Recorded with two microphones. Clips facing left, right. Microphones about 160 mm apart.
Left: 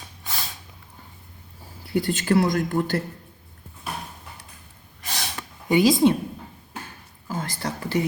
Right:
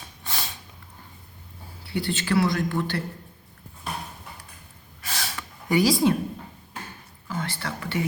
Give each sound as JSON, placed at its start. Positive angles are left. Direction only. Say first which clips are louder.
{"t": 1.9, "sound": "speech", "louder": "left 4 dB", "side_deg": 45}
{"t": 5.0, "sound": "gasp", "louder": "left 1 dB", "side_deg": 20}
{"t": 5.6, "sound": "speech", "louder": "left 3 dB", "side_deg": 20}
{"t": 7.3, "sound": "speech", "louder": "left 2 dB", "side_deg": 40}